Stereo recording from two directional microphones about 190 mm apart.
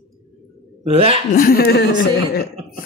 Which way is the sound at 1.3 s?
50° left (ahead or behind).